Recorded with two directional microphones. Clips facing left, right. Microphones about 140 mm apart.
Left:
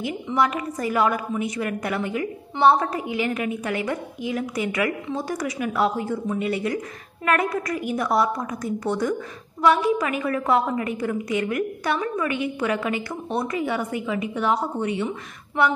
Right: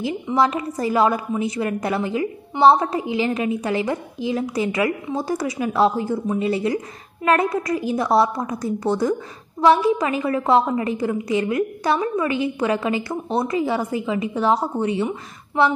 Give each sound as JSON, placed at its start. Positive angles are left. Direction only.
{"t": 0.3, "sound": "a woman's voice", "side_deg": -25}